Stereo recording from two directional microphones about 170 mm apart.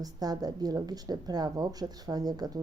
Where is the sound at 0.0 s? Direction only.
20° right (ahead or behind).